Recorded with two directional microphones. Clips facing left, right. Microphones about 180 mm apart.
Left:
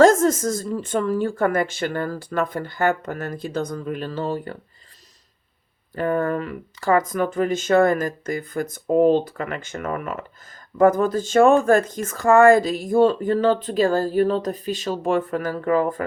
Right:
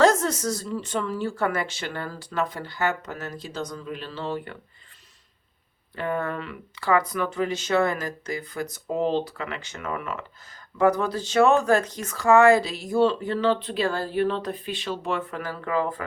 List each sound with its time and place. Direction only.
0.0 s speech: 45° left (ahead or behind)
6.0 s speech: 45° left (ahead or behind)